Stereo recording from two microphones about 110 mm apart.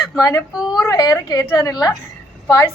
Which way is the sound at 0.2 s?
25° left (ahead or behind).